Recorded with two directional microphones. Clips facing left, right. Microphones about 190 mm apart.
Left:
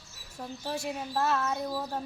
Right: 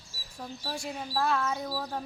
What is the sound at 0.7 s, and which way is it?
Speech, 5° left (ahead or behind).